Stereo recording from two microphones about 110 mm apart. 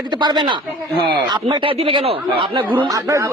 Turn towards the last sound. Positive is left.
turn(degrees=-30)  # may be behind; listen again after turning